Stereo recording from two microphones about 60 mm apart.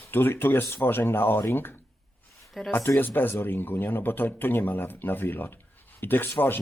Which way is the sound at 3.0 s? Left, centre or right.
Left.